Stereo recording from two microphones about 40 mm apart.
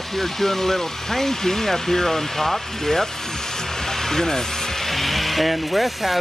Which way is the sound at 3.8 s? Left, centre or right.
Centre.